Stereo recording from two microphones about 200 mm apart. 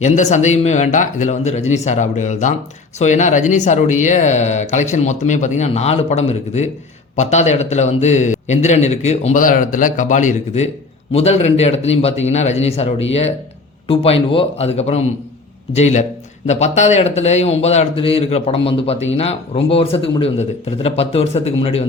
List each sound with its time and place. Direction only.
0.0 s speech: 35° left (ahead or behind)